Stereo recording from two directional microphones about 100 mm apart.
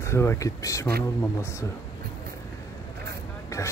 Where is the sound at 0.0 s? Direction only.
30° left (ahead or behind).